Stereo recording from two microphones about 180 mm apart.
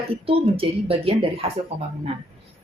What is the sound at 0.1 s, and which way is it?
Speech, 30° right (ahead or behind).